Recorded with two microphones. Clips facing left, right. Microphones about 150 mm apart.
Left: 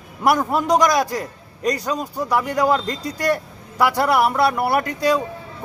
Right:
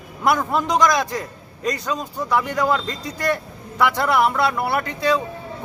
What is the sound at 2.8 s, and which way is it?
Speech, 40° left (ahead or behind).